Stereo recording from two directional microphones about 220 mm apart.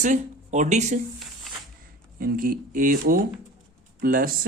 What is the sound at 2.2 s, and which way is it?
Speech, 40° right (ahead or behind).